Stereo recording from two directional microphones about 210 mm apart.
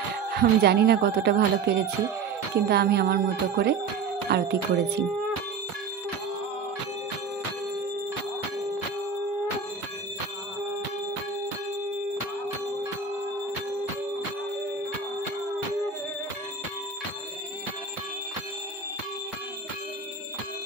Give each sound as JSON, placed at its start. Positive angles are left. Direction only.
{"t": 0.3, "sound": "speech", "side_deg": -50}